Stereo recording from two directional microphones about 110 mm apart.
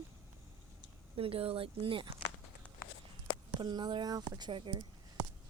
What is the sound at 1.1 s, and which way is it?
Speech, 60° right (ahead or behind).